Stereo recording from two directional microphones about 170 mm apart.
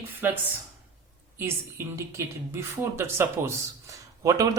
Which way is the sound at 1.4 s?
15° right (ahead or behind).